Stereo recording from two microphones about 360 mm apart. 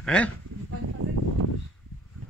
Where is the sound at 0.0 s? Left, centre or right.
Centre.